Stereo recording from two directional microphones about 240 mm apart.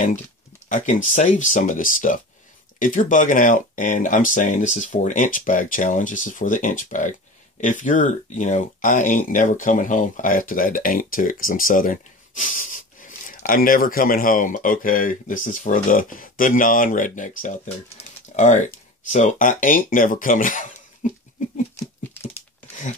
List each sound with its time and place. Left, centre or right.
0.7 s speech: left